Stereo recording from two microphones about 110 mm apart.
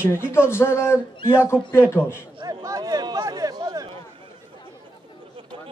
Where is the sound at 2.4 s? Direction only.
30° right (ahead or behind).